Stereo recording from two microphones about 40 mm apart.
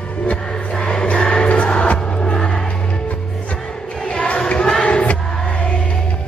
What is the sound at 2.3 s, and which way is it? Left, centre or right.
Music, left.